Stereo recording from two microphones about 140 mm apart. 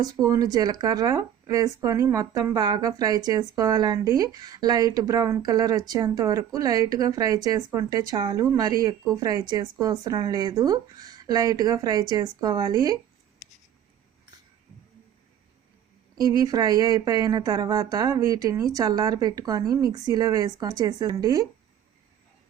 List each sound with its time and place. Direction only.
0.0 s speech: 25° right (ahead or behind)
16.1 s speech: 30° right (ahead or behind)